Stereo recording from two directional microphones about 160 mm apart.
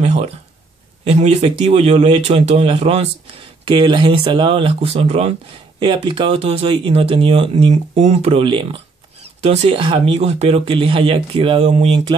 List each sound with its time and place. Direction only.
0.0 s a sound: 40° right (ahead or behind)
1.0 s speech: 40° right (ahead or behind)
3.6 s speech: 30° right (ahead or behind)
5.8 s speech: 30° right (ahead or behind)